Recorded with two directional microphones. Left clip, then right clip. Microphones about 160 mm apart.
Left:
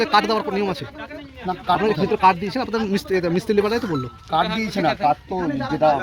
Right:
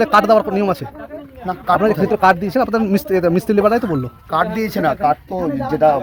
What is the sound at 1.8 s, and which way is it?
Speech, 90° right.